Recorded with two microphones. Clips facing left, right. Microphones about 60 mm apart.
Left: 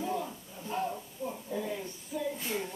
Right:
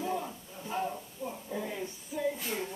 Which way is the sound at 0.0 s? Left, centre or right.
Centre.